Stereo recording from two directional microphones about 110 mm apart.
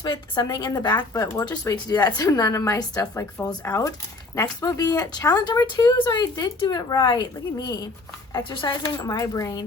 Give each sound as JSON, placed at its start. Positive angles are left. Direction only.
{"t": 0.0, "sound": "a woman's voice", "side_deg": 40}